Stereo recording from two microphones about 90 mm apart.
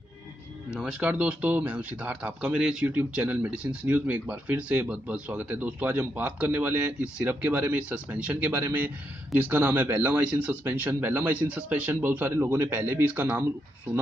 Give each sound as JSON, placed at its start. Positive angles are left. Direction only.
{"t": 0.7, "sound": "speech", "side_deg": -10}